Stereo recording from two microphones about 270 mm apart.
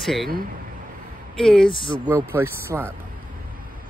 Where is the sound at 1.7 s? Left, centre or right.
Centre.